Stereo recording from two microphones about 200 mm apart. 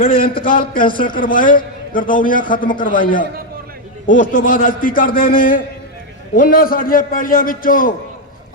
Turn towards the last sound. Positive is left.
turn(degrees=45)  # may be behind; listen again after turning